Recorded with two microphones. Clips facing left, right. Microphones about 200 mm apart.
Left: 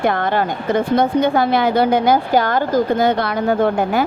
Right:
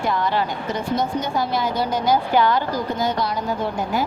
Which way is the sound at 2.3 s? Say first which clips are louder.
Left 3 dB; 45° left (ahead or behind).